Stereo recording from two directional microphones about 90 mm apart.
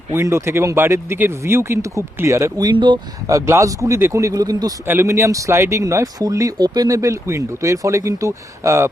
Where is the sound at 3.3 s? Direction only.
35° right (ahead or behind).